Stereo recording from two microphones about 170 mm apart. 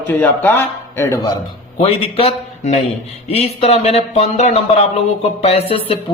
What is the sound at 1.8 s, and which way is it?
A man's voice, 35° left (ahead or behind).